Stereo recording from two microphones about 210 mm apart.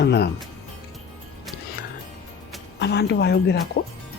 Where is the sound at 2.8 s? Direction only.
50° left (ahead or behind).